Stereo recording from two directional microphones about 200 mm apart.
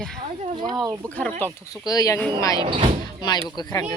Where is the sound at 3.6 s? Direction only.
20° left (ahead or behind).